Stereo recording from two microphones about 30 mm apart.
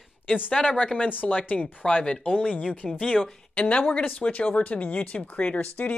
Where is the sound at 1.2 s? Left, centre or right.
Left.